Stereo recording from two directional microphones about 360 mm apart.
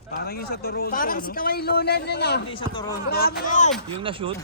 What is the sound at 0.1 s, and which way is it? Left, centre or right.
A man's voice, left.